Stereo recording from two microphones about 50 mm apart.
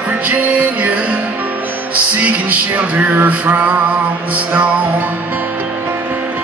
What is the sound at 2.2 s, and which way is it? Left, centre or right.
Male singing, right.